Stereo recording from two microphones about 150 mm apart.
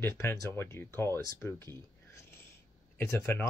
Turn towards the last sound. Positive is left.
turn(degrees=15)  # may be behind; listen again after turning